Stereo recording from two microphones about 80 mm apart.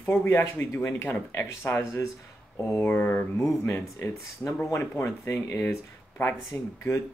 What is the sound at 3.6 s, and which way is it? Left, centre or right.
Speech, left.